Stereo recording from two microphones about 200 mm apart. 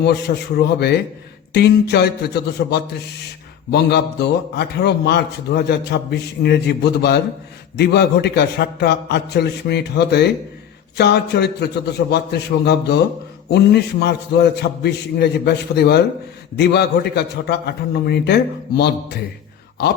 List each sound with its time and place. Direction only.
0.0 s a man's voice: 55° left (ahead or behind)